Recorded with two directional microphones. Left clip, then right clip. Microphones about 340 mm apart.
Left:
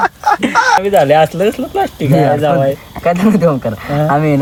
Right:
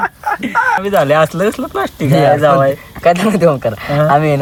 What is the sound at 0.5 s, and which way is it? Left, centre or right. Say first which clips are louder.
Speech: left 1 dB; centre.